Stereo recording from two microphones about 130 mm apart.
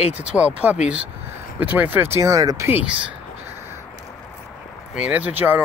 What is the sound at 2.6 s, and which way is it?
Speech, 15° right (ahead or behind).